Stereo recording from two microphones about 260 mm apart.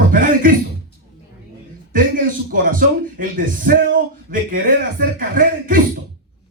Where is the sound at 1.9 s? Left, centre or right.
Right.